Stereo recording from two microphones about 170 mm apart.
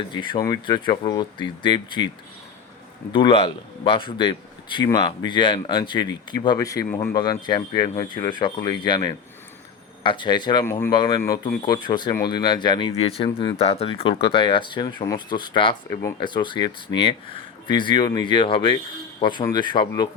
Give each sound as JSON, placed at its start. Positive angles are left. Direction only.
{"t": 0.1, "sound": "a man's voice", "side_deg": 25}
{"t": 3.1, "sound": "a man's voice", "side_deg": 30}